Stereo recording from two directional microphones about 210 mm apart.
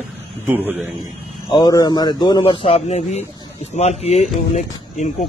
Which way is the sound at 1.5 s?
20° left (ahead or behind).